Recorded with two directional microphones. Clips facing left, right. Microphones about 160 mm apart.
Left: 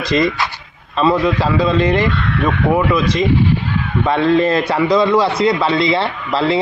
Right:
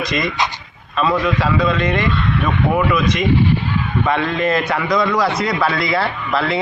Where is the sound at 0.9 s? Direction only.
30° left (ahead or behind).